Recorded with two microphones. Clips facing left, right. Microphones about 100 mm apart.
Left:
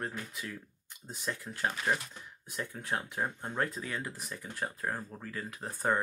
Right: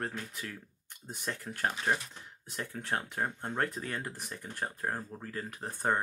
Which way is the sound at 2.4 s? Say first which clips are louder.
Even; 70° right (ahead or behind).